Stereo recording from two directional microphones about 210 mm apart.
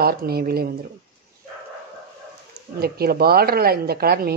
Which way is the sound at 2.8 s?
45° right (ahead or behind).